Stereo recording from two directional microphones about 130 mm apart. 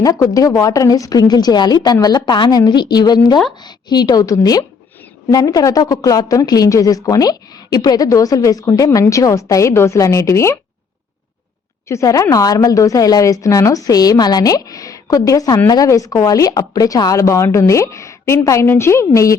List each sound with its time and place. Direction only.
0.0 s a woman's voice: 30° left (ahead or behind)
11.9 s a woman's voice: 25° left (ahead or behind)